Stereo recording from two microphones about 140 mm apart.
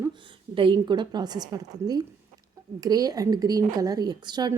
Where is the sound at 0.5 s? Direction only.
35° right (ahead or behind).